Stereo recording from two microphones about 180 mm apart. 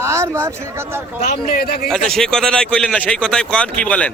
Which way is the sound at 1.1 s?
40° left (ahead or behind).